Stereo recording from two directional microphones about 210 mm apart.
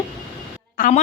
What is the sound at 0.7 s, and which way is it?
Speech, 40° left (ahead or behind).